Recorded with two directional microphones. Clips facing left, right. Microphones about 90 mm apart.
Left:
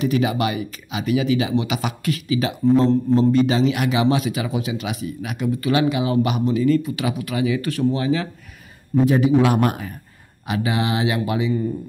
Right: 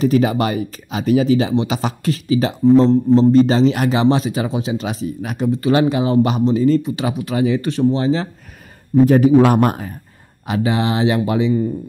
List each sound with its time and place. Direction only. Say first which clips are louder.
0.0 s a man's voice: right 4 dB; 40° right (ahead or behind)
2.6 s a man's voice: right 5 dB; 20° right (ahead or behind)
9.0 s a man's voice: right 5 dB; 45° right (ahead or behind)